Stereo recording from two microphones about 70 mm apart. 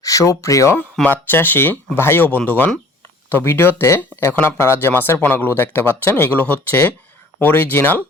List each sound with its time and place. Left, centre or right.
0.0 s speech: left
1.0 s speech: left